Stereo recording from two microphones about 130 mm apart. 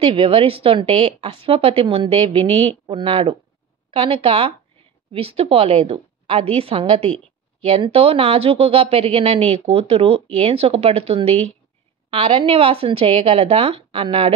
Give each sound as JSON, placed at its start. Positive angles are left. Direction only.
{"t": 0.0, "sound": "speech", "side_deg": -45}